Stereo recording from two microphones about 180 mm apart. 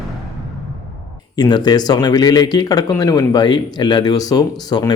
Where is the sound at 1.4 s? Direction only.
25° left (ahead or behind).